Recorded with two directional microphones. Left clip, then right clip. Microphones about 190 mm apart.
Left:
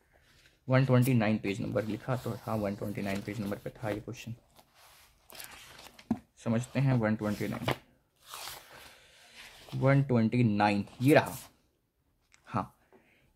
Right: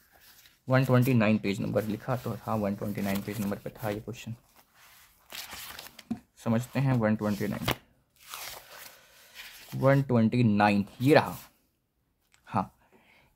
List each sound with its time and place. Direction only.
0.7 s speech: 20° right (ahead or behind)
6.0 s speech: 25° right (ahead or behind)
9.8 s speech: 25° right (ahead or behind)